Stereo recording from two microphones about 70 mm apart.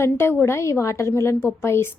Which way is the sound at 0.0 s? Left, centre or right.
Left.